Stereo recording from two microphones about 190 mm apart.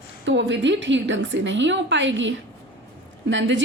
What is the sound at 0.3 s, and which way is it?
A woman's voice, 70° right (ahead or behind).